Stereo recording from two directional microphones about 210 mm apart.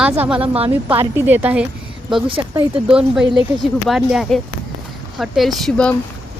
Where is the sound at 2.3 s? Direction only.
20° right (ahead or behind).